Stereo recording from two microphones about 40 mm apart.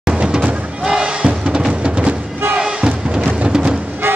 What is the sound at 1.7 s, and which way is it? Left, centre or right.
Music, right.